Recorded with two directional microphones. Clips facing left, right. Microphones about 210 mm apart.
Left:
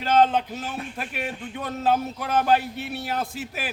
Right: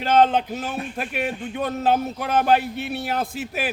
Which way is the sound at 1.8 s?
25° right (ahead or behind).